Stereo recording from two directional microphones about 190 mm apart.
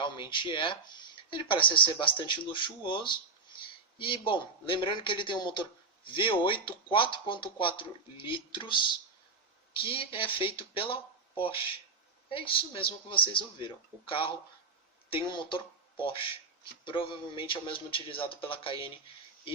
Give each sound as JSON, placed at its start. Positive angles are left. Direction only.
{"t": 0.0, "sound": "speech", "side_deg": 25}